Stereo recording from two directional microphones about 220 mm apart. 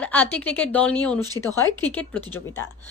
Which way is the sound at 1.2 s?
20° right (ahead or behind).